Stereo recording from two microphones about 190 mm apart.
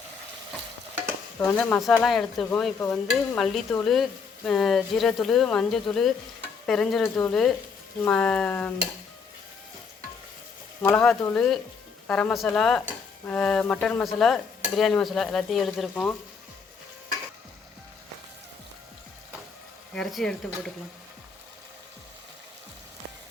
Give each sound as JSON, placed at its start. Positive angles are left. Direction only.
{"t": 1.4, "sound": "speech", "side_deg": 10}
{"t": 10.8, "sound": "speech", "side_deg": 5}
{"t": 19.9, "sound": "speech", "side_deg": 0}